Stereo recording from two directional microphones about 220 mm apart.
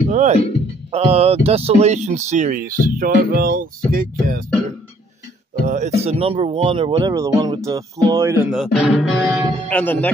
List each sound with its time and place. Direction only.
0.1 s speech: 30° right (ahead or behind)
5.6 s speech: 35° right (ahead or behind); by 10.1 s 5° left (ahead or behind)